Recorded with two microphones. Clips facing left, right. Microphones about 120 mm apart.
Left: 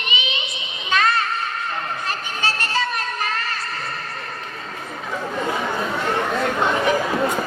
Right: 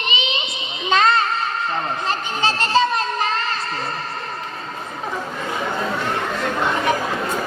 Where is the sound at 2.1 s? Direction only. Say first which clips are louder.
Right 5 dB; 25° right (ahead or behind).